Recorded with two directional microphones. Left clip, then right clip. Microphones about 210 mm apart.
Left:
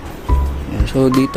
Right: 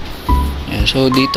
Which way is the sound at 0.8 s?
15° left (ahead or behind).